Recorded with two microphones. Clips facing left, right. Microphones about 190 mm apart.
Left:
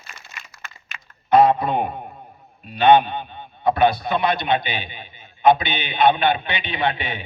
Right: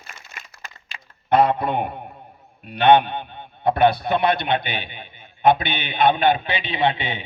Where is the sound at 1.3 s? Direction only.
60° right (ahead or behind).